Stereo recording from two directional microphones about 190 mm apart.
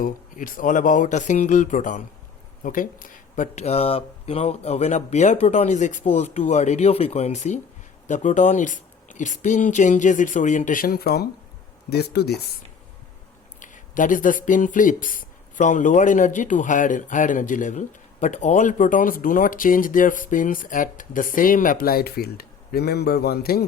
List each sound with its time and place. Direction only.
0.0 s speech: 45° left (ahead or behind)
13.6 s speech: 45° left (ahead or behind)